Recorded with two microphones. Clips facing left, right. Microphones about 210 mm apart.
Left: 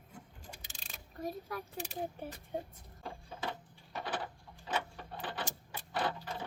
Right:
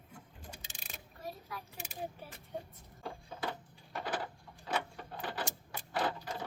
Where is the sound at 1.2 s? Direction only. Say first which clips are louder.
Left 6 dB; 45° left (ahead or behind).